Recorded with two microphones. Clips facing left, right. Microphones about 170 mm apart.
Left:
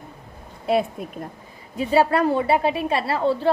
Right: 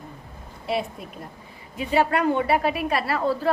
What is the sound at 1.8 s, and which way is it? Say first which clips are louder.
A woman's voice: left 3 dB; 35° left (ahead or behind).